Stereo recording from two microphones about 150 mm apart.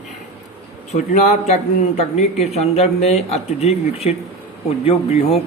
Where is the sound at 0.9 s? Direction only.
50° left (ahead or behind).